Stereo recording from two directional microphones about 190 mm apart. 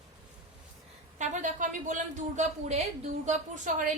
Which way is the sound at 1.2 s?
40° right (ahead or behind).